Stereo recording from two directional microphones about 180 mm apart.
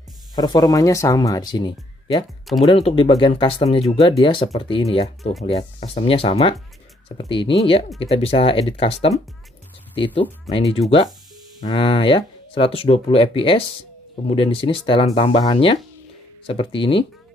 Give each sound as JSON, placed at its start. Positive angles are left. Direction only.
{"t": 0.4, "sound": "speech", "side_deg": 20}
{"t": 11.6, "sound": "speech", "side_deg": 30}